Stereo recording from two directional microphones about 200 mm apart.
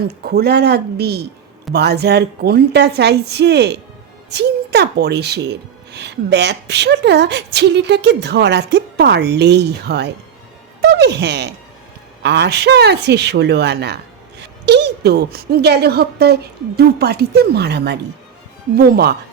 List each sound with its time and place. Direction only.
0.0 s a woman's voice: 50° right (ahead or behind)